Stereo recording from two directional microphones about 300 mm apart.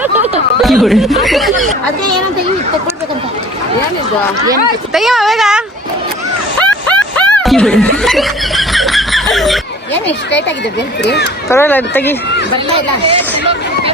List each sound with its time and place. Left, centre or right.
0.0 s snicker: centre
4.9 s speech: centre
6.6 s snicker: centre
11.0 s speech: left
11.4 s speech: centre